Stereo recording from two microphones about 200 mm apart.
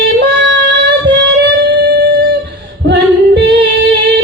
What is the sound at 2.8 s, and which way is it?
Female singing, 60° right (ahead or behind).